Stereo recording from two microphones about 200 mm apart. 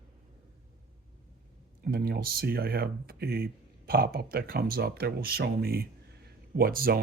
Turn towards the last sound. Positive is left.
turn(degrees=-45)  # may be behind; listen again after turning